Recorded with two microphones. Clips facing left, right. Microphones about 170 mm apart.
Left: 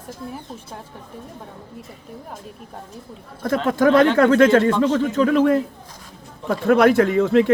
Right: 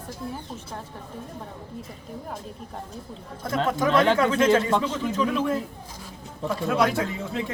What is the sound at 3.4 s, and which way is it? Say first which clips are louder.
Speech: left 6 dB; 70° left (ahead or behind).